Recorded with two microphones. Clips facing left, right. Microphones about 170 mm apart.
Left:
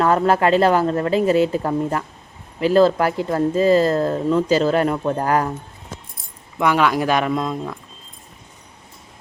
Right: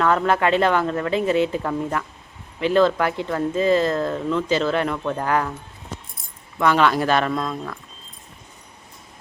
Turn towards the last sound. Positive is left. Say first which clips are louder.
# left 3 dB
turn(degrees=15)  # may be behind; listen again after turning